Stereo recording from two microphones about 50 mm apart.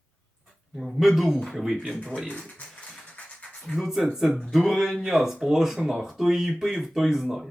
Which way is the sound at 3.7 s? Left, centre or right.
Centre.